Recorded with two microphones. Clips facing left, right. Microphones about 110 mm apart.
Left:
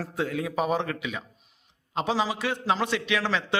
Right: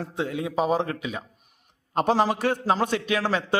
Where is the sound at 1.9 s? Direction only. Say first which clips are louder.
Right 5 dB; 50° right (ahead or behind).